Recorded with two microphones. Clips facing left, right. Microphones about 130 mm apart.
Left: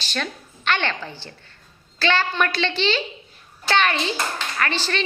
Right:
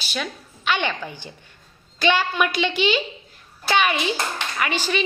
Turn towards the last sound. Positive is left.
turn(degrees=-10)  # may be behind; listen again after turning